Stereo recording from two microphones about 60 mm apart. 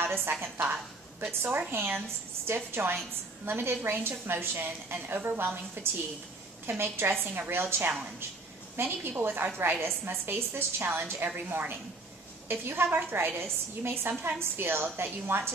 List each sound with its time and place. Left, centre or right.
0.0 s a woman's voice: right
1.7 s a woman's voice: right